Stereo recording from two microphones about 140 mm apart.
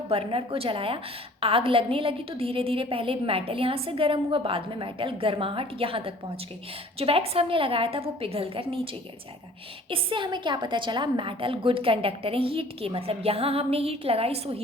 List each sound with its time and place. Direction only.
0.1 s a woman's voice: 40° right (ahead or behind)
9.9 s a woman's voice: 35° right (ahead or behind)